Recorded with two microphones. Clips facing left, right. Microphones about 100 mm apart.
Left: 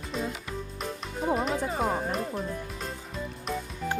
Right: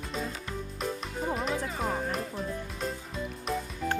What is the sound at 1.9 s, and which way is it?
Speech, 25° left (ahead or behind).